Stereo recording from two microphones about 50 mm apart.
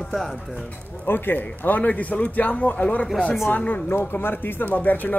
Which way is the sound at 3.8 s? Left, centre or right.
Left.